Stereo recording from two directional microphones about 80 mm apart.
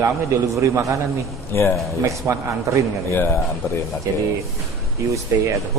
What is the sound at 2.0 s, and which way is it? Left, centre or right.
A man's voice, right.